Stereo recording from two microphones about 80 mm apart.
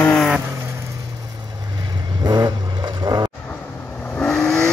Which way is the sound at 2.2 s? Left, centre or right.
Right.